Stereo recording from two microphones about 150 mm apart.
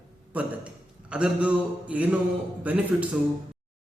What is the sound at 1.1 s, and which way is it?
A man's voice, 5° right (ahead or behind).